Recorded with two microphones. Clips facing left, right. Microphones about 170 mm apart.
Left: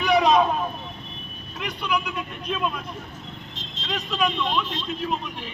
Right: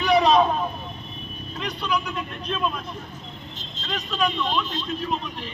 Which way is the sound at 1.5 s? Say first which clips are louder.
Even; 10° left (ahead or behind).